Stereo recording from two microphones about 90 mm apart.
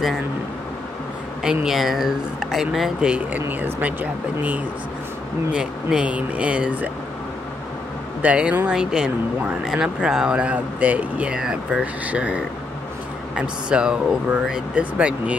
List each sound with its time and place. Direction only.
1.4 s speech: 10° right (ahead or behind)
3.3 s speech: 20° right (ahead or behind)
8.2 s speech: 15° right (ahead or behind)